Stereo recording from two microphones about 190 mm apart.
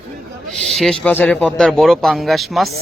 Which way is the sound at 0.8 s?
5° left (ahead or behind).